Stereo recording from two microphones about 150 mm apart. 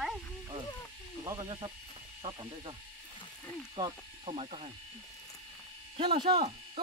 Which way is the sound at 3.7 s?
35° right (ahead or behind).